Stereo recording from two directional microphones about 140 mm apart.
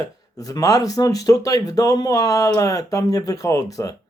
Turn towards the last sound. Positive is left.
turn(degrees=25)  # may be behind; listen again after turning